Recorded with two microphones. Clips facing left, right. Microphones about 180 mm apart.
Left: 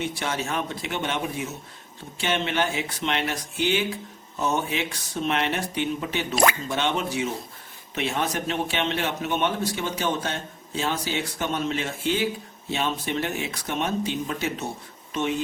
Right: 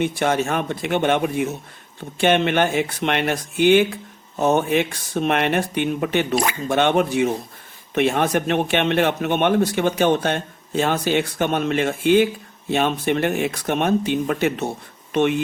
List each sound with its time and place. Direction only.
0.0 s a man's voice: 55° right (ahead or behind)